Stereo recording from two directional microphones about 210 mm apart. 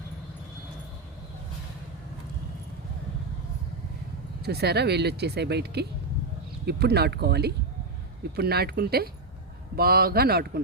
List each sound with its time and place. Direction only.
4.4 s speech: 50° right (ahead or behind)